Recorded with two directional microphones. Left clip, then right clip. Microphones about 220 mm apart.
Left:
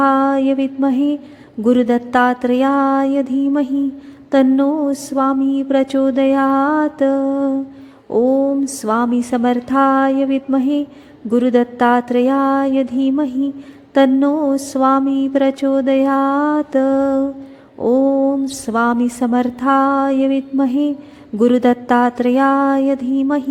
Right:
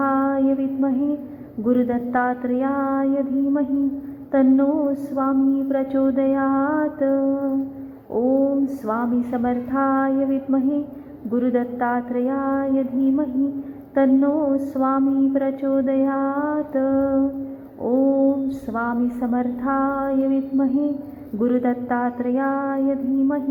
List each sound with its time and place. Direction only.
0.0 s mantra: 50° left (ahead or behind)
8.8 s mantra: 50° left (ahead or behind)